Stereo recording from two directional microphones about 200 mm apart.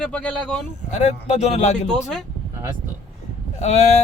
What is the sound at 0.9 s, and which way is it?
Speech, 35° left (ahead or behind).